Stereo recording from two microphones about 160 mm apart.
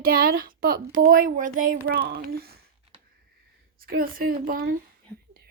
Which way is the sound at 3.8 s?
65° right (ahead or behind).